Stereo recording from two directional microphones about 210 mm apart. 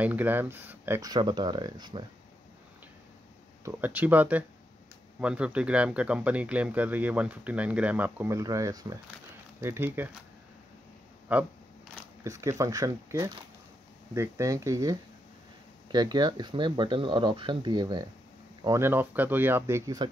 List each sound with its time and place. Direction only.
0.0 s speech: 10° right (ahead or behind)
3.6 s speech: 10° right (ahead or behind)
11.3 s speech: 5° right (ahead or behind)